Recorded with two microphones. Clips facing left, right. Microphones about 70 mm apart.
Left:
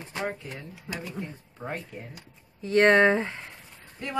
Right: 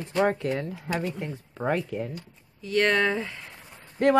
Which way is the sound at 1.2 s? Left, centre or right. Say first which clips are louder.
Right 5 dB; right.